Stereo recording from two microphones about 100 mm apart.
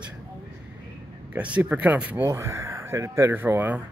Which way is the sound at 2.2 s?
30° right (ahead or behind).